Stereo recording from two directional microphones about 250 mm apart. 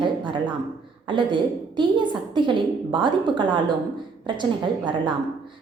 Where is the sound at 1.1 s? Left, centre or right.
Centre.